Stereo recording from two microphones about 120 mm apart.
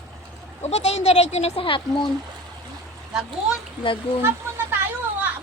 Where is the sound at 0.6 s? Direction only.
65° left (ahead or behind); by 2.1 s 45° left (ahead or behind).